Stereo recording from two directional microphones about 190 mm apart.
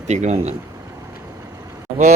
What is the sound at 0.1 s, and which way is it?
Speech, 35° right (ahead or behind).